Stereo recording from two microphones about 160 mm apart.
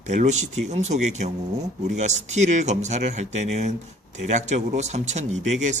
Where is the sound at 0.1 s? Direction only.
45° right (ahead or behind).